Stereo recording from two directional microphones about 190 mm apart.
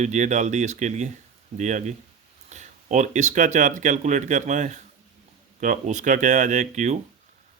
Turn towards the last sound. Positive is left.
turn(degrees=-40)  # may be behind; listen again after turning